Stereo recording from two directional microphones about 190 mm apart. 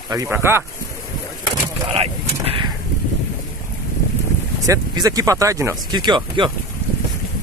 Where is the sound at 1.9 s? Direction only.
30° right (ahead or behind).